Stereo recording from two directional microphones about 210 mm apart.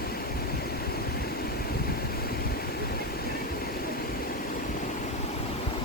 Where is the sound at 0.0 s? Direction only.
45° left (ahead or behind).